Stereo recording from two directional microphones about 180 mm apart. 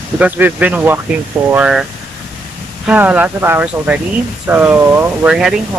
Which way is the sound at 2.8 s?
10° right (ahead or behind).